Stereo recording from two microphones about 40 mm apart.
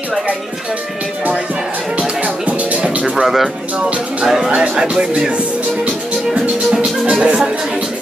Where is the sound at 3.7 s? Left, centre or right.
Right.